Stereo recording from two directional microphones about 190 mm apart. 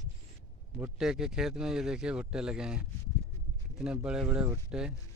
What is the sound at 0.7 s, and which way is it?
Speech, 5° right (ahead or behind).